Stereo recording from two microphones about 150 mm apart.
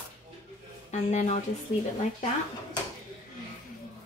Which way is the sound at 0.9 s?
50° left (ahead or behind).